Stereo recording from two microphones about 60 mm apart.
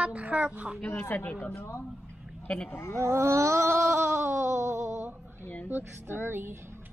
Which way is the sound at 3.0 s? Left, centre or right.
Right.